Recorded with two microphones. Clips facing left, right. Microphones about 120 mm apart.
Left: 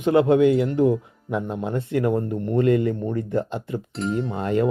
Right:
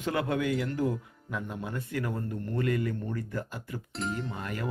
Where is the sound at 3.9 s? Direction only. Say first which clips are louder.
Left 6 dB; centre (ahead or behind).